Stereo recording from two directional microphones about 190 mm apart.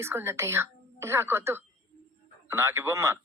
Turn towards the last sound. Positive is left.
turn(degrees=-15)  # may be behind; listen again after turning